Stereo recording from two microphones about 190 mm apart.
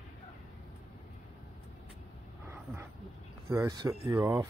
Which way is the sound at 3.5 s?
15° right (ahead or behind).